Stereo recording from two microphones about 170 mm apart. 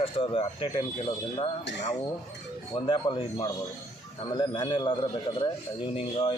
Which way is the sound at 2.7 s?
25° left (ahead or behind).